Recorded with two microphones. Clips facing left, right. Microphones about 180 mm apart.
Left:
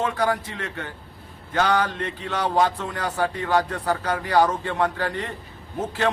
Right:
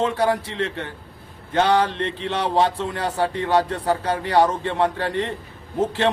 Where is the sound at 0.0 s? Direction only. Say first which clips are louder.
Right 3 dB; 30° right (ahead or behind).